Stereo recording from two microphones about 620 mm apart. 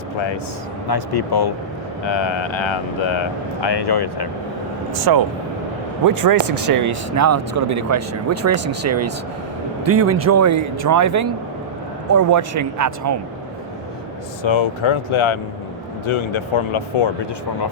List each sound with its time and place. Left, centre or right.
0.9 s speech: left
5.1 s speech: right
14.4 s speech: left